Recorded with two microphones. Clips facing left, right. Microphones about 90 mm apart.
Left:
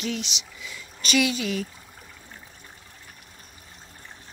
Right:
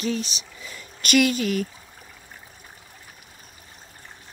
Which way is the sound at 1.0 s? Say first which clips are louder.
Right 4 dB; 50° right (ahead or behind).